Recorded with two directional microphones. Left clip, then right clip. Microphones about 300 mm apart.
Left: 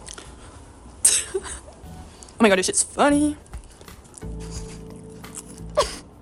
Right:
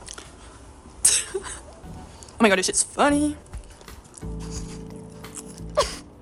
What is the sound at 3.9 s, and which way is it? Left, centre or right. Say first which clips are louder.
Music: even; centre.